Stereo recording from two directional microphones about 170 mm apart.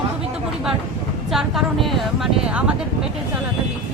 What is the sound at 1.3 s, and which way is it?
Speech, centre (ahead or behind).